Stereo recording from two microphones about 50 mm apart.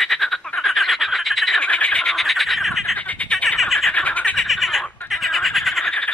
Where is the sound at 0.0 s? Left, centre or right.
Centre.